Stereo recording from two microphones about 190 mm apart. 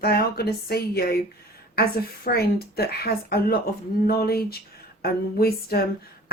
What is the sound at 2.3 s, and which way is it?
Speech, 55° left (ahead or behind).